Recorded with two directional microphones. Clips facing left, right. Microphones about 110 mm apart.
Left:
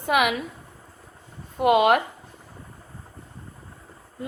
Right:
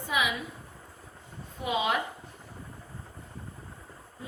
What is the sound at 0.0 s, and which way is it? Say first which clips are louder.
Speech: left 8 dB; 70° left (ahead or behind).